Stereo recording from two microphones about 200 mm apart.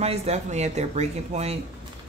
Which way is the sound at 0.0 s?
30° right (ahead or behind).